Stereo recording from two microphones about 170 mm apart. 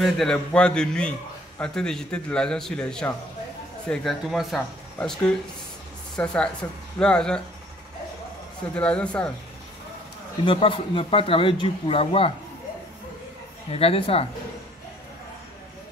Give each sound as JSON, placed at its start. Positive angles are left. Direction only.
{"t": 0.0, "sound": "a man's voice", "side_deg": 5}
{"t": 6.1, "sound": "a man's voice", "side_deg": 5}
{"t": 8.7, "sound": "speech", "side_deg": 5}
{"t": 10.4, "sound": "speech", "side_deg": 30}
{"t": 13.7, "sound": "speech", "side_deg": 35}